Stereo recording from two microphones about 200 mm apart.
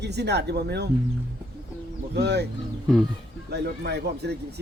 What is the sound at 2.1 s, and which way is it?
Speech, 55° right (ahead or behind).